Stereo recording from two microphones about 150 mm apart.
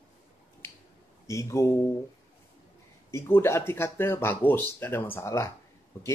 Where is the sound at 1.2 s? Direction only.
20° left (ahead or behind).